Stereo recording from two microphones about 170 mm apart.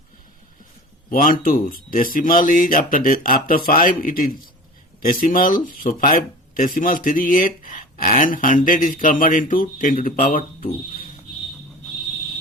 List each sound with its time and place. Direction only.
1.1 s speech: 55° left (ahead or behind)